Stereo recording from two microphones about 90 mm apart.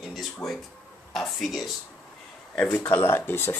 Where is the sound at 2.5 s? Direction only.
20° left (ahead or behind).